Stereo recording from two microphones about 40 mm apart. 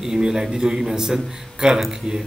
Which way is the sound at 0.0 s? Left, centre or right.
Centre.